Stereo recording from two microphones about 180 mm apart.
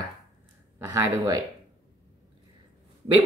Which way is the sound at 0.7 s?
15° right (ahead or behind).